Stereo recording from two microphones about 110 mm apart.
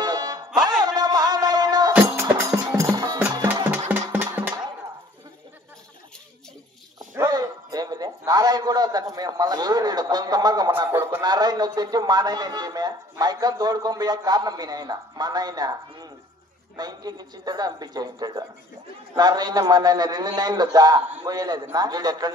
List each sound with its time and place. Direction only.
0.0 s music: 40° right (ahead or behind)
2.1 s music: 25° right (ahead or behind)
3.9 s music: 15° right (ahead or behind)
7.0 s dog: 35° right (ahead or behind)
10.8 s a man's voice: 25° right (ahead or behind)
11.2 s a man's voice: 40° right (ahead or behind)